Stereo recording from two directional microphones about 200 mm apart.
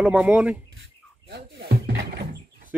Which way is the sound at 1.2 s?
55° right (ahead or behind).